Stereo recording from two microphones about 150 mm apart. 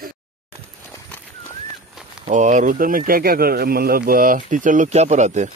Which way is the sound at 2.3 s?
55° right (ahead or behind).